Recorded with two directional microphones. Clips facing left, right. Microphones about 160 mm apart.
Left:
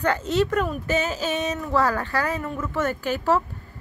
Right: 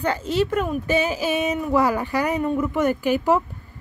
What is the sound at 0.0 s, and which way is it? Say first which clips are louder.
Speech: even; 10° right (ahead or behind).